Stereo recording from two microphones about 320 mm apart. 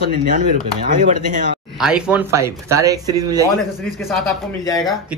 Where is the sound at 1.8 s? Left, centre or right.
Centre.